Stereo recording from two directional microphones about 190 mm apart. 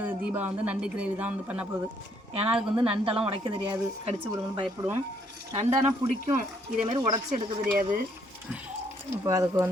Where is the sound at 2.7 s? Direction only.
30° right (ahead or behind).